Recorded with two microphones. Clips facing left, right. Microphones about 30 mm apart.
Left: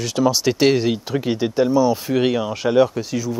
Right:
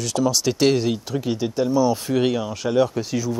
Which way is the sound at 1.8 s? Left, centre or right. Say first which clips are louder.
Left 2 dB; centre.